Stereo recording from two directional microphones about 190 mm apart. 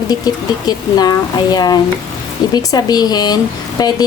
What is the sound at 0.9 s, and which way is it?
A woman's voice, 20° left (ahead or behind).